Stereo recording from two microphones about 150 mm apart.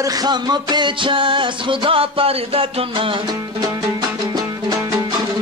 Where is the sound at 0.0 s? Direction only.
25° right (ahead or behind).